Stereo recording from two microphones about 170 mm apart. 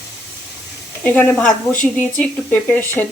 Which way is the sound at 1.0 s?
10° left (ahead or behind).